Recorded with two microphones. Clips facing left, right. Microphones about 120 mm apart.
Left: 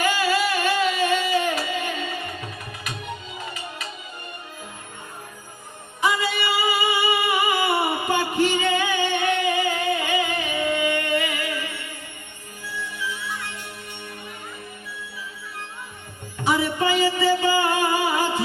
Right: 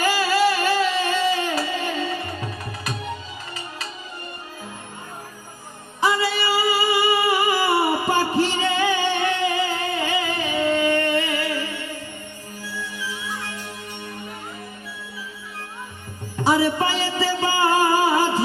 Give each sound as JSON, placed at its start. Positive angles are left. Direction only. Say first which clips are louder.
{"t": 0.0, "sound": "singing", "louder": "right 3 dB", "side_deg": -35}
{"t": 6.0, "sound": "music", "louder": "right 2 dB", "side_deg": -35}
{"t": 12.9, "sound": "music", "louder": "left 1 dB", "side_deg": -35}
{"t": 16.4, "sound": "a sound", "louder": "right 3 dB", "side_deg": -35}